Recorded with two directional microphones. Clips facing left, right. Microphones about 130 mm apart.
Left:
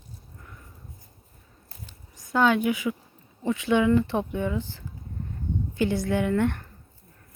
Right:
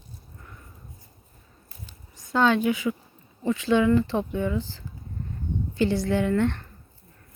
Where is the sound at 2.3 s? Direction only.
10° left (ahead or behind).